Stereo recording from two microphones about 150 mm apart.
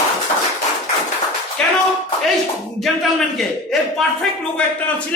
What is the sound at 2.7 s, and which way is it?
A man's voice, centre (ahead or behind).